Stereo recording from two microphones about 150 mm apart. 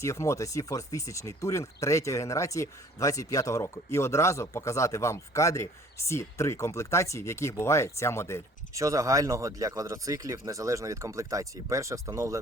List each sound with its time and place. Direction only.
0.0 s speech: 20° left (ahead or behind)
8.7 s speech: 20° right (ahead or behind)